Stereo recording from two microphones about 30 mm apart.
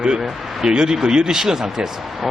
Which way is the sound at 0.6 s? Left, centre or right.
Right.